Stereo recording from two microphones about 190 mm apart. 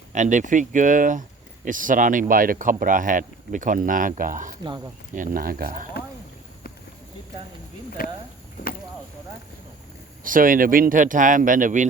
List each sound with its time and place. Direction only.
0.1 s speech: 40° right (ahead or behind)
8.0 s speech: 50° left (ahead or behind)
10.2 s speech: 45° right (ahead or behind)